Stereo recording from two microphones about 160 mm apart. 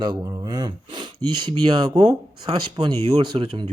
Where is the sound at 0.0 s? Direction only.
25° right (ahead or behind).